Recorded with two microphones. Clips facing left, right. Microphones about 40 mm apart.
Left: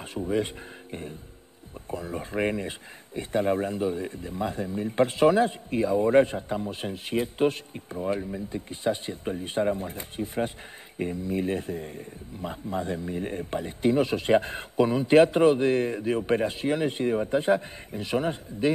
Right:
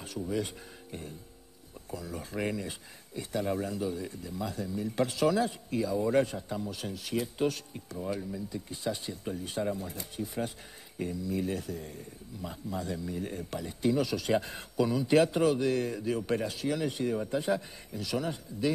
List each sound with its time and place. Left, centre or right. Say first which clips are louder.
0.0 s speech: left 6 dB; left
1.9 s a man's voice: left 6 dB; left